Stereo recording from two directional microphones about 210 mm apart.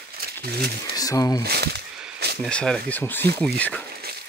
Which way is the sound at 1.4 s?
50° right (ahead or behind).